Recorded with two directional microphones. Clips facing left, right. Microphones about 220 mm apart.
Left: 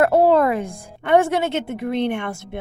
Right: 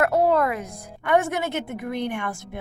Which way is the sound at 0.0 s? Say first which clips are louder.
Left 5 dB; 30° left (ahead or behind).